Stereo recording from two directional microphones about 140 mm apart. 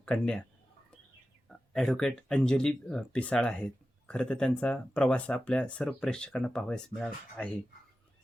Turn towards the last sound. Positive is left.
turn(degrees=5)  # may be behind; listen again after turning